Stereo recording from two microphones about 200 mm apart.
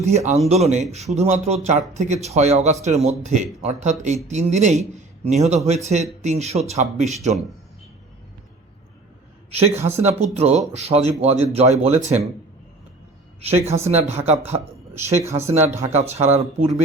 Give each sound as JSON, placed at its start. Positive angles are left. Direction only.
{"t": 0.0, "sound": "speech", "side_deg": -35}
{"t": 9.5, "sound": "a man's voice", "side_deg": -30}
{"t": 13.8, "sound": "speech", "side_deg": -30}